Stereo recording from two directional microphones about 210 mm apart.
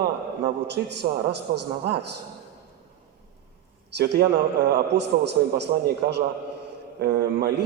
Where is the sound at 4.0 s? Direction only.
50° right (ahead or behind).